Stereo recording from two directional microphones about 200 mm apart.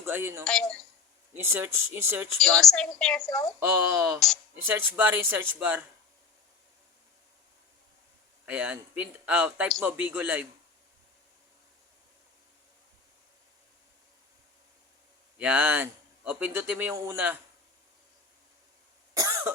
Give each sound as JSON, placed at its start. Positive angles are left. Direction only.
{"t": 0.0, "sound": "speech", "side_deg": -10}
{"t": 0.4, "sound": "a woman's voice", "side_deg": 5}
{"t": 1.3, "sound": "a man's voice", "side_deg": -10}
{"t": 2.4, "sound": "a woman's voice", "side_deg": 0}
{"t": 3.2, "sound": "speech", "side_deg": 15}
{"t": 3.6, "sound": "a man's voice", "side_deg": -15}
{"t": 8.4, "sound": "a man's voice", "side_deg": -5}
{"t": 15.4, "sound": "a man's voice", "side_deg": -5}
{"t": 19.1, "sound": "cough", "side_deg": -15}